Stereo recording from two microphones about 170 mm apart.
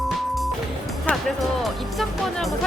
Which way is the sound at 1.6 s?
Centre (ahead or behind).